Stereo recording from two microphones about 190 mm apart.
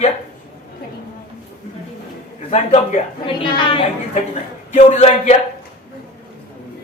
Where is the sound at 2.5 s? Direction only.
35° left (ahead or behind).